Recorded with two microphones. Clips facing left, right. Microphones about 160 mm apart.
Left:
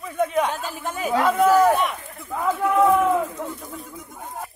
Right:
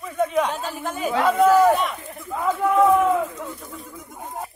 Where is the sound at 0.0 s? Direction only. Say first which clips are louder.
Even; centre (ahead or behind).